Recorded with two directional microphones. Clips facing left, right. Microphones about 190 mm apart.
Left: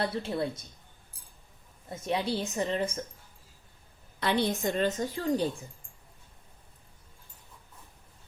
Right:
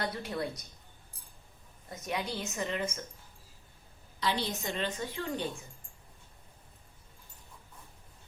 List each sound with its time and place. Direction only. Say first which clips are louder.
0.0 s a woman's voice: left 4 dB; 25° left (ahead or behind)
1.9 s speech: left 6 dB; 25° left (ahead or behind)
4.2 s a woman's voice: left 5 dB; 55° left (ahead or behind); by 5.6 s 35° left (ahead or behind)